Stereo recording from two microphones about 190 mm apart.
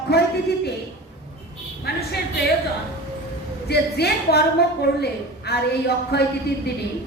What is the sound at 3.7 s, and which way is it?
Speech, 60° left (ahead or behind).